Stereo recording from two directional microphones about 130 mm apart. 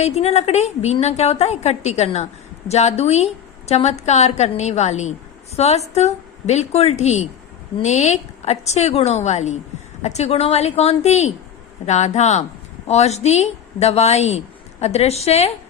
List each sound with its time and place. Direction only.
0.0 s a woman's voice: 55° left (ahead or behind)